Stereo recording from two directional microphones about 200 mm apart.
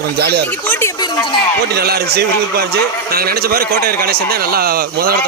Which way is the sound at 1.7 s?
50° right (ahead or behind).